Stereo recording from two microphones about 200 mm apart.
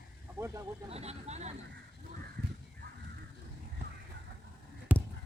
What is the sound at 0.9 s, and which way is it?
Speech, 30° right (ahead or behind).